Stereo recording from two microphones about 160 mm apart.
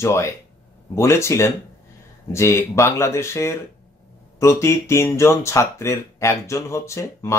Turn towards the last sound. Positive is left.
turn(degrees=20)  # may be behind; listen again after turning